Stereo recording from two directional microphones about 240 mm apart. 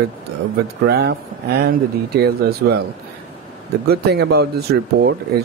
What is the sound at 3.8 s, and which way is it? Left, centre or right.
Speech, right.